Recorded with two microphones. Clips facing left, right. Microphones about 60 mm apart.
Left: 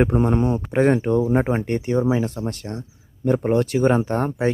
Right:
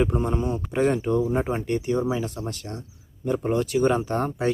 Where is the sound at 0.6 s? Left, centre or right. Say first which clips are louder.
Left 4 dB; left.